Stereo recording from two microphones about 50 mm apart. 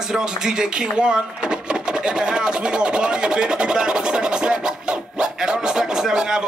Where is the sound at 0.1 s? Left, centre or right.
Centre.